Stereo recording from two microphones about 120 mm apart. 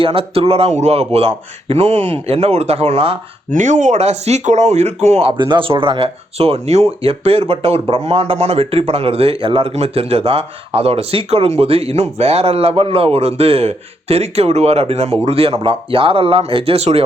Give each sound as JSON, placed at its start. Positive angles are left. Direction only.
{"t": 0.0, "sound": "speech", "side_deg": -50}
{"t": 3.5, "sound": "speech", "side_deg": -90}
{"t": 5.4, "sound": "speech", "side_deg": -45}